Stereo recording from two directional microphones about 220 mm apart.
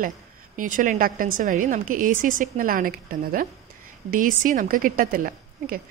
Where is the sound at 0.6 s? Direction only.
35° right (ahead or behind).